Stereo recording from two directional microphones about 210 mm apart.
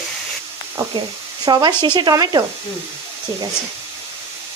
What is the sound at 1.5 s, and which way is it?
Speech, 20° right (ahead or behind).